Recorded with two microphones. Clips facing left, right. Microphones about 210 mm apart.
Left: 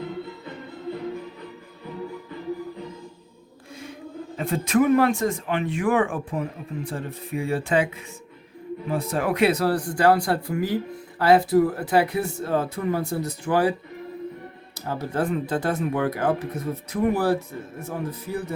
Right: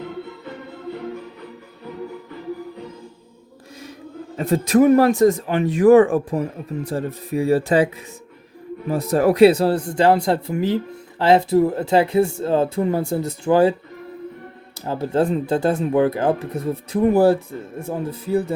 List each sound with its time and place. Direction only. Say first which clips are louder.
4.4 s speech: right 5 dB; 40° right (ahead or behind)
8.9 s speech: right 7 dB; 40° right (ahead or behind)
14.8 s speech: right 6 dB; 30° right (ahead or behind)